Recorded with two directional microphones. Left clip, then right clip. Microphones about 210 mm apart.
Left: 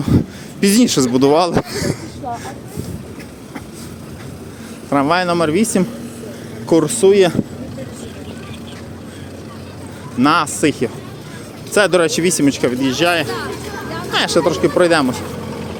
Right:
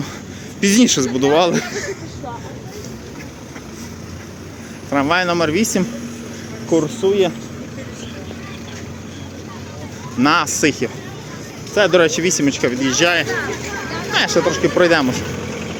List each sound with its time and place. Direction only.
0.6 s speech: 20° left (ahead or behind)
4.9 s speech: 20° left (ahead or behind)
6.7 s speech: 45° left (ahead or behind)
10.2 s speech: 10° left (ahead or behind)
11.7 s speech: 30° left (ahead or behind)